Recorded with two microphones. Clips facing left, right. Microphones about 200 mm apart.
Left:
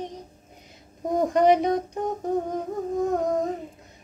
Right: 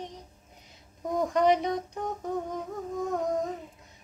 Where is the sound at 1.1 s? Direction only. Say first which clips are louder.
Left 5 dB; 50° left (ahead or behind).